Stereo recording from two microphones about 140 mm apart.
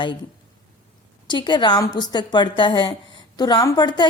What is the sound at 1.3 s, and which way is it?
A woman's voice, 35° left (ahead or behind).